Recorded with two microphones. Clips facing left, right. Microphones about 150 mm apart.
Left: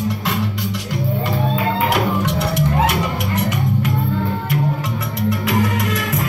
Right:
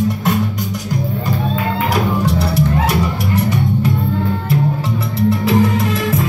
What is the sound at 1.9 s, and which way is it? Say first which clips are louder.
Music: right 2 dB; 35° right (ahead or behind).